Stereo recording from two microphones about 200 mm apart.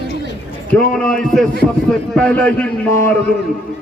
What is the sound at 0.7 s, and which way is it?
A man's voice, 5° left (ahead or behind).